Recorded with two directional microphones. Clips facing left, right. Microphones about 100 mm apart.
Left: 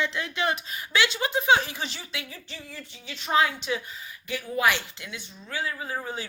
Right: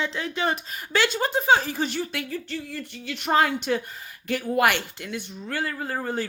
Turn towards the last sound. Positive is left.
turn(degrees=-60)  # may be behind; listen again after turning